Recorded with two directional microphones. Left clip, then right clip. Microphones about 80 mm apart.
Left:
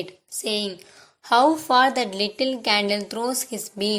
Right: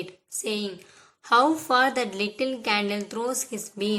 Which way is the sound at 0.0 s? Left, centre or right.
Left.